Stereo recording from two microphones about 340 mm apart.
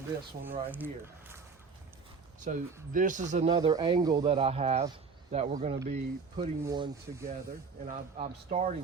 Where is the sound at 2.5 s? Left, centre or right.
Right.